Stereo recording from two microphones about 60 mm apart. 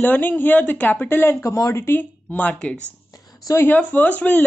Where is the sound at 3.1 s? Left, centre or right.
Left.